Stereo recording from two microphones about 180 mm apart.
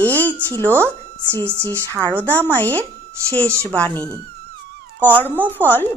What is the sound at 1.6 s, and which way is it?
Speech, 10° left (ahead or behind).